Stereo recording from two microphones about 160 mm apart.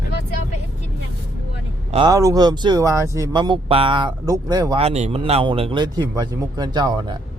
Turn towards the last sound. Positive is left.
turn(degrees=-25)  # may be behind; listen again after turning